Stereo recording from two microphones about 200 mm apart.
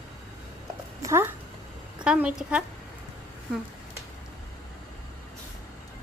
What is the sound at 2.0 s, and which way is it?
Speech, 5° right (ahead or behind).